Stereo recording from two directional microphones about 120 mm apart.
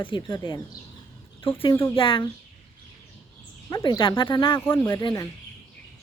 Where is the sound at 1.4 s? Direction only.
45° left (ahead or behind).